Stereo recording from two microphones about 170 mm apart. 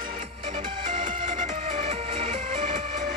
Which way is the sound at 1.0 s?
30° right (ahead or behind).